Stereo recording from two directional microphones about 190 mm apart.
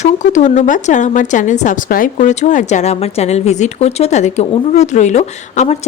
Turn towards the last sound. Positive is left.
turn(degrees=35)  # may be behind; listen again after turning